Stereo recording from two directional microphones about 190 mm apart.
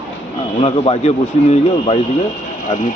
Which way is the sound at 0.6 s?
30° left (ahead or behind).